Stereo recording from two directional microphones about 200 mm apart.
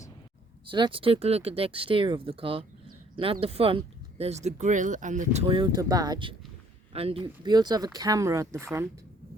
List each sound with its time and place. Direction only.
0.6 s speech: 25° right (ahead or behind)